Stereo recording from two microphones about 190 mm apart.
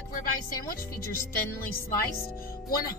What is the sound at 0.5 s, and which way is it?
Speech, 15° left (ahead or behind).